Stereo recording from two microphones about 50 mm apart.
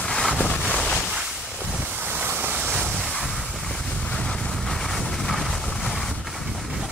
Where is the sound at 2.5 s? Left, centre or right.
Right.